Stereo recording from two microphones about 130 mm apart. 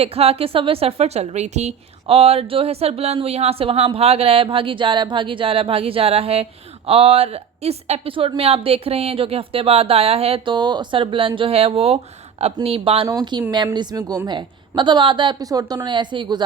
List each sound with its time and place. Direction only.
0.0 s a woman's voice: 50° right (ahead or behind)
13.3 s speech: 35° right (ahead or behind)